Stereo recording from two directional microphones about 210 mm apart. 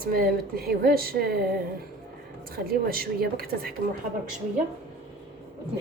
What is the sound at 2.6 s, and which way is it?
A woman's voice, 45° right (ahead or behind).